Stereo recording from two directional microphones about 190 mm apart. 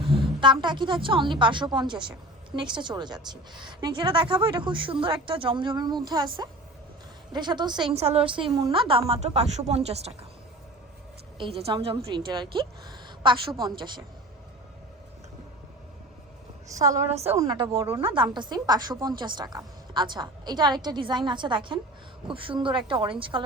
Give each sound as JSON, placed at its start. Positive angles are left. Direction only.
{"t": 0.0, "sound": "a woman's voice", "side_deg": -25}
{"t": 11.3, "sound": "a woman's voice", "side_deg": -30}
{"t": 16.6, "sound": "a woman's voice", "side_deg": -15}
{"t": 16.9, "sound": "a woman's voice", "side_deg": -35}
{"t": 17.3, "sound": "a woman's voice", "side_deg": -20}